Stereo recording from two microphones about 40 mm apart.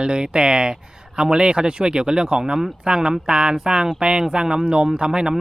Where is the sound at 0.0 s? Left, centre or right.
Right.